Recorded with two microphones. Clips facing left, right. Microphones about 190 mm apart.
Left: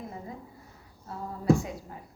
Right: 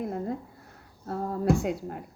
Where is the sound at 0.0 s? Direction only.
65° right (ahead or behind).